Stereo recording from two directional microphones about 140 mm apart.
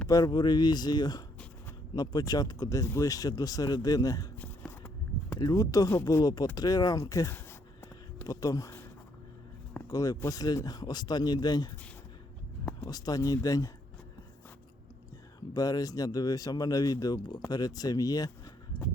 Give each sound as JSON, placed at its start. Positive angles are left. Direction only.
{"t": 0.1, "sound": "speech", "side_deg": 25}
{"t": 4.4, "sound": "a sound", "side_deg": 15}
{"t": 5.3, "sound": "speech", "side_deg": 25}
{"t": 8.2, "sound": "a sound", "side_deg": 25}
{"t": 9.7, "sound": "speech", "side_deg": 25}
{"t": 12.8, "sound": "speech", "side_deg": 25}
{"t": 15.5, "sound": "speech", "side_deg": 25}